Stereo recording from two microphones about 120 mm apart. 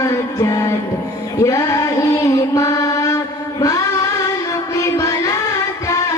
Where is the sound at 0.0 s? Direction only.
25° left (ahead or behind).